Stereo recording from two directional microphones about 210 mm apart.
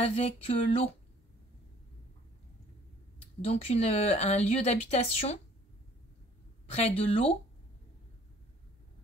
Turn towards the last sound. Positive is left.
turn(degrees=30)  # may be behind; listen again after turning